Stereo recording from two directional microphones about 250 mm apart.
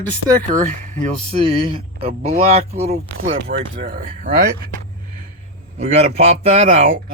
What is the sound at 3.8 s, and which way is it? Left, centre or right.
Speech, right.